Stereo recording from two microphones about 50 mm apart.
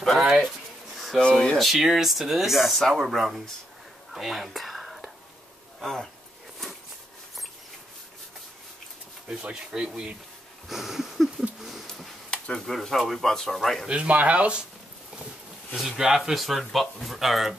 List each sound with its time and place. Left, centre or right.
0.0 s speech: centre
0.9 s a sound: centre
1.3 s speech: centre
1.6 s speech: centre
4.1 s whispering: centre
5.8 s speech: centre
9.5 s speech: centre
11.6 s a sound: centre
12.3 s a sound: left
12.6 s speech: centre
13.8 s speech: right
15.7 s speech: centre